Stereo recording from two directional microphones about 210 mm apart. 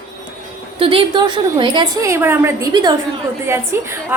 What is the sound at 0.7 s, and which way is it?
A woman's voice, 25° right (ahead or behind).